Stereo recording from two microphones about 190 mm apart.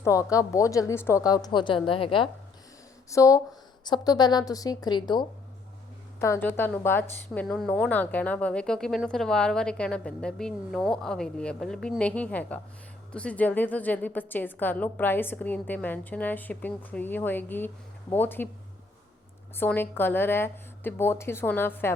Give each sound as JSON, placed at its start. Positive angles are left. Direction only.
{"t": 0.0, "sound": "a woman's voice", "side_deg": 15}
{"t": 3.1, "sound": "a woman's voice", "side_deg": 15}
{"t": 19.5, "sound": "a woman's voice", "side_deg": 10}